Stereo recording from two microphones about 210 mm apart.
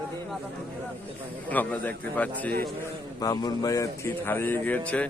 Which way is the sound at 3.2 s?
20° left (ahead or behind).